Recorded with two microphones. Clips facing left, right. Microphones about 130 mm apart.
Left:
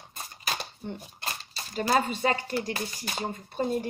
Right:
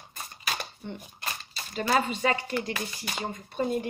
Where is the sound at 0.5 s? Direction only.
35° left (ahead or behind).